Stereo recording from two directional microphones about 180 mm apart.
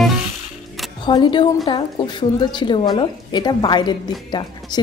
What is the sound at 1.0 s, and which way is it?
A woman's voice, 25° left (ahead or behind).